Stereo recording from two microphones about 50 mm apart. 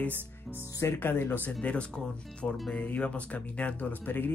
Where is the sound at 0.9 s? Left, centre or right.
Left.